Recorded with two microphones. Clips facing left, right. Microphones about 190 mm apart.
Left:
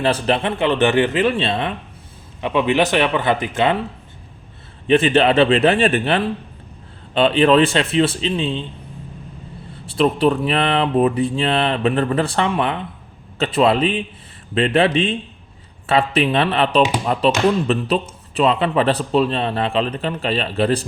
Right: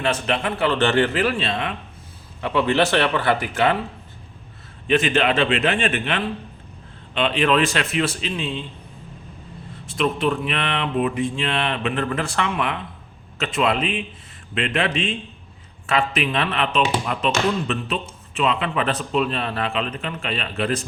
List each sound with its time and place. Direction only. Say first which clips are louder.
0.0 s a man's voice: left 4 dB; 30° left (ahead or behind)
2.4 s a man's voice: left 2 dB; 15° left (ahead or behind)
4.9 s a man's voice: left 5 dB; 30° left (ahead or behind)
9.8 s speech: left 5 dB; 35° left (ahead or behind)